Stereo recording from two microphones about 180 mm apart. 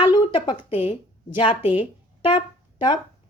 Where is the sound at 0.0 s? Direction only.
25° left (ahead or behind).